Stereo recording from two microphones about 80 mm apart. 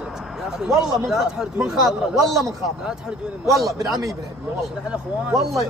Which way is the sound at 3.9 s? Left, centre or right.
Right.